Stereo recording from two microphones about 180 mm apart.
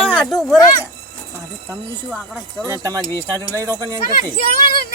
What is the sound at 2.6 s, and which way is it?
A man's voice, 15° right (ahead or behind).